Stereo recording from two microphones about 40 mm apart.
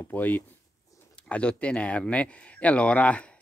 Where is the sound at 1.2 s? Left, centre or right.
Left.